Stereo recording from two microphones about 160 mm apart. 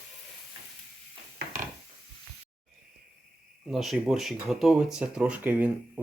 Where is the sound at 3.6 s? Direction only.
Centre (ahead or behind).